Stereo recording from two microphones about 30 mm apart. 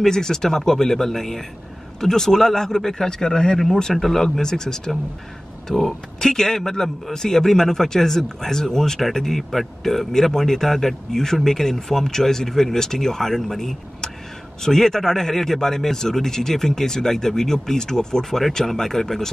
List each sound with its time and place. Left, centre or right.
0.0 s speech: centre